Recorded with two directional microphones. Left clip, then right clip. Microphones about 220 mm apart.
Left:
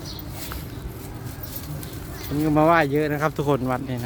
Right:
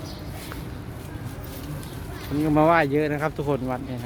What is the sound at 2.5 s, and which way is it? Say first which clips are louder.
Speech: left 1 dB; 10° left (ahead or behind).